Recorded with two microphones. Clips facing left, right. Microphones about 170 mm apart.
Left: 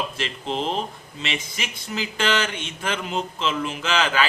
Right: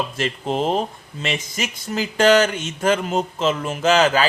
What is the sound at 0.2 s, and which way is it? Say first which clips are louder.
Speech: right 5 dB; 45° right (ahead or behind).